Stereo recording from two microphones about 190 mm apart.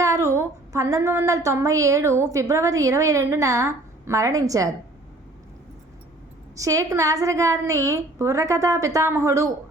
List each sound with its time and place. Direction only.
0.0 s a woman's voice: 15° right (ahead or behind)
6.6 s a woman's voice: 15° right (ahead or behind)